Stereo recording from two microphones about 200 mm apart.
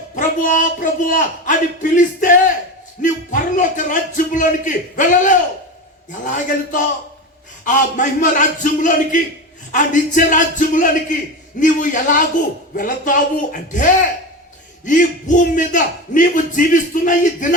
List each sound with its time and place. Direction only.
0.2 s speech: 40° left (ahead or behind)